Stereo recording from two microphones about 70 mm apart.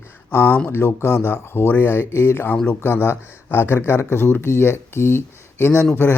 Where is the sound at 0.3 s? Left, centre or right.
Left.